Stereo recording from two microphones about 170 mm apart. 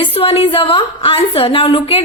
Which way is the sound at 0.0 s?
35° left (ahead or behind).